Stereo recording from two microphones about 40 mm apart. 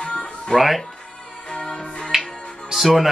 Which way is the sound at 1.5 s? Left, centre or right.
Left.